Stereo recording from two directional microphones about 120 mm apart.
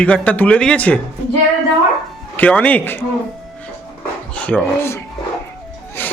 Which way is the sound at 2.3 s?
10° left (ahead or behind).